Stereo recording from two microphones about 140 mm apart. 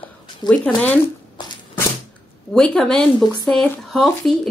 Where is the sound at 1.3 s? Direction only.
25° left (ahead or behind).